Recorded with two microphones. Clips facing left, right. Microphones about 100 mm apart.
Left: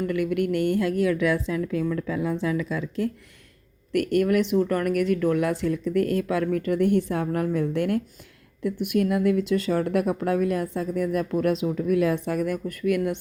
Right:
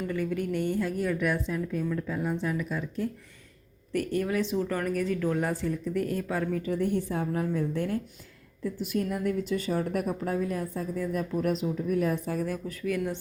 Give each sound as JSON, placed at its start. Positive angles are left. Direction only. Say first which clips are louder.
{"t": 0.1, "sound": "a woman's voice", "louder": "left 4 dB", "side_deg": 75}
{"t": 3.9, "sound": "speech", "louder": "left 7 dB", "side_deg": 70}